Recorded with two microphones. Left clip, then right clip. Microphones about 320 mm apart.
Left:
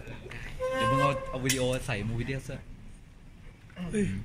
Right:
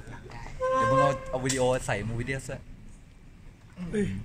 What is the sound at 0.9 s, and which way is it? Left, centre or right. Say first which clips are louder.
Speech: right 3 dB; right.